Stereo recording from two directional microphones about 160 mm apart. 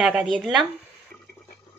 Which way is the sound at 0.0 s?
Centre (ahead or behind).